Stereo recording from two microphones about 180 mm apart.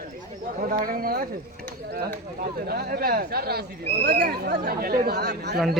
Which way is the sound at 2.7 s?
60° right (ahead or behind).